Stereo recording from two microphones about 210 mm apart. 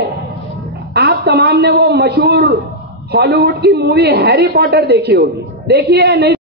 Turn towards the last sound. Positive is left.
turn(degrees=-50)  # may be behind; listen again after turning